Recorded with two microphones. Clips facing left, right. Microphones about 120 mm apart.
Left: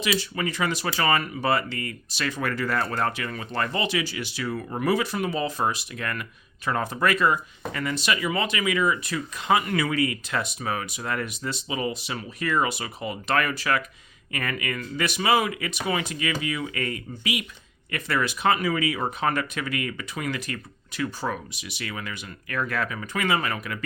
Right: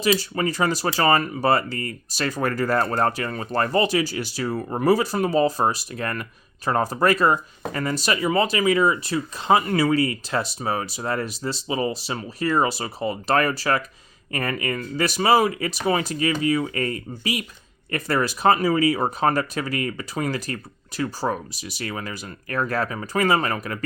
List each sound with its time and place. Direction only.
0.0 s speech: 40° right (ahead or behind)